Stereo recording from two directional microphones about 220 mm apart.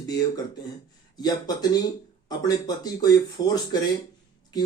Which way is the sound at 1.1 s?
20° left (ahead or behind).